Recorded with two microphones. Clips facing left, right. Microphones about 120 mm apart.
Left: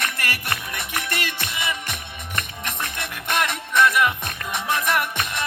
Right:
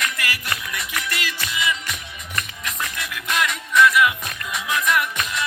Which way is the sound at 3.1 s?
40° left (ahead or behind).